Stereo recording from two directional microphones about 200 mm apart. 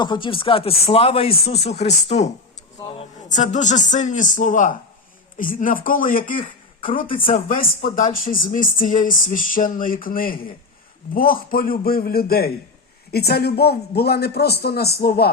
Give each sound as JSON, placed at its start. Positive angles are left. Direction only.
{"t": 0.0, "sound": "speech", "side_deg": 25}